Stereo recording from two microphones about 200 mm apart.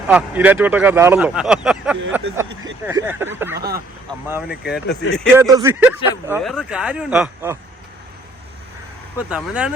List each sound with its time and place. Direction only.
0.1 s speech: 5° right (ahead or behind)
3.6 s speech: 50° right (ahead or behind)
4.4 s speech: 55° left (ahead or behind)
5.3 s speech: 15° right (ahead or behind)
9.1 s speech: 5° right (ahead or behind)